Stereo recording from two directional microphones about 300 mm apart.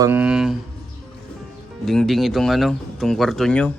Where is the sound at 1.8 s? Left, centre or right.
Centre.